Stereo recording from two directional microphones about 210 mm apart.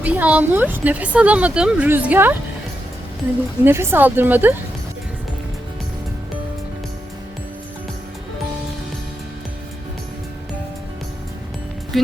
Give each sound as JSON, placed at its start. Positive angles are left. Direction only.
{"t": 0.0, "sound": "speech", "side_deg": -5}
{"t": 3.6, "sound": "speech", "side_deg": -10}
{"t": 11.9, "sound": "speech", "side_deg": 0}